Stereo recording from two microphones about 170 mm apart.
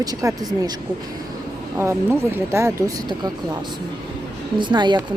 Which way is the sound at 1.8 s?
15° right (ahead or behind).